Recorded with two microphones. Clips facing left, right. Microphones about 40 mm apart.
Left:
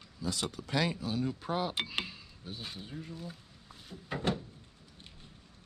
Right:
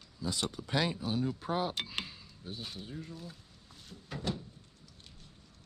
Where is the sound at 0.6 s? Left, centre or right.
Left.